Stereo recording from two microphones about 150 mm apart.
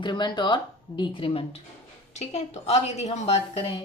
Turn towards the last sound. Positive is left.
turn(degrees=40)  # may be behind; listen again after turning